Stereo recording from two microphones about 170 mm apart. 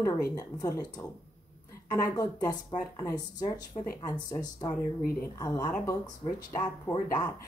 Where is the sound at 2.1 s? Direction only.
20° left (ahead or behind).